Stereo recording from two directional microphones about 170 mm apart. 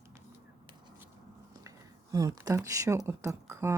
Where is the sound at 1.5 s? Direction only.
20° right (ahead or behind).